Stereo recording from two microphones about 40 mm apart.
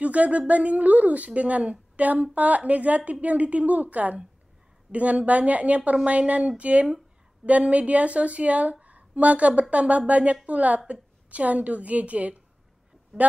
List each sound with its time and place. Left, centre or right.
0.0 s speech: right